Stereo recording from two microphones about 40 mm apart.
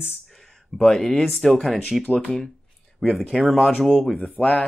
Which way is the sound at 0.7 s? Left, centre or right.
Centre.